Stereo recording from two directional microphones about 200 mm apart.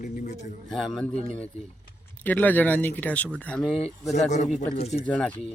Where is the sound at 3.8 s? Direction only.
35° left (ahead or behind).